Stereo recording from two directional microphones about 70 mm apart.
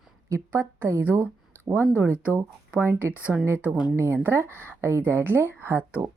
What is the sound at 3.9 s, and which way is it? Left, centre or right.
A woman's voice, right.